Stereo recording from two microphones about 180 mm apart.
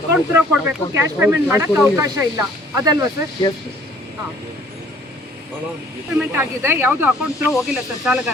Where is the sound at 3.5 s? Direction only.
25° left (ahead or behind).